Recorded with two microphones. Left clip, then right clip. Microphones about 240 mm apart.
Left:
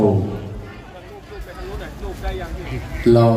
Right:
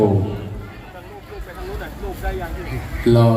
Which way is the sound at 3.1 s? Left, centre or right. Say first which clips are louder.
Left 2 dB; left.